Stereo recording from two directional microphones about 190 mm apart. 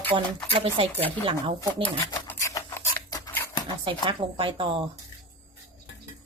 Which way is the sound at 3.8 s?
25° right (ahead or behind).